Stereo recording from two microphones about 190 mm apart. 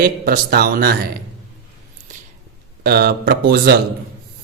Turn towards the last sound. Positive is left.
turn(degrees=-55)  # may be behind; listen again after turning